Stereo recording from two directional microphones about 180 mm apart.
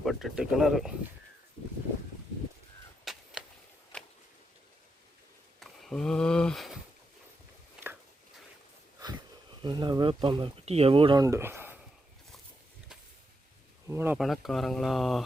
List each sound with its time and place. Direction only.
0.0 s speech: centre (ahead or behind)
3.0 s a sound: centre (ahead or behind)
5.5 s speech: centre (ahead or behind)
9.6 s speech: 25° right (ahead or behind)
11.2 s speech: 15° right (ahead or behind)
13.8 s speech: 15° right (ahead or behind)
14.2 s speech: centre (ahead or behind)